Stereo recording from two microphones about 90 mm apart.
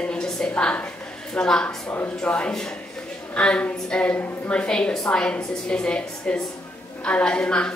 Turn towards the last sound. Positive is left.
turn(degrees=10)  # may be behind; listen again after turning